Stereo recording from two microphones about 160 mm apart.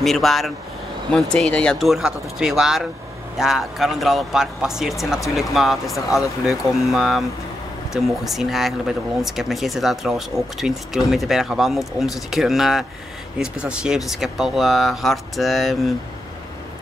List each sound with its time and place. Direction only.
0.0 s speech: centre (ahead or behind)